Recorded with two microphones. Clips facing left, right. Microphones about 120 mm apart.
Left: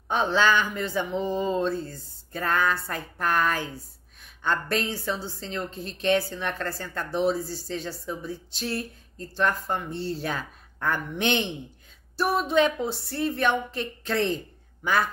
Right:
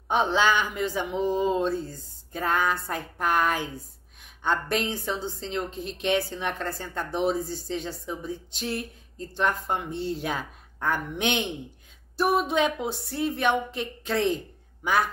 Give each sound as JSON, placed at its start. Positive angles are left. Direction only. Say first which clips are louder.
{"t": 0.1, "sound": "a woman's voice", "louder": "even", "side_deg": -15}